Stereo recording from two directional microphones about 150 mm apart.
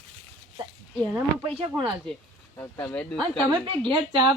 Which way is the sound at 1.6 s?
30° right (ahead or behind).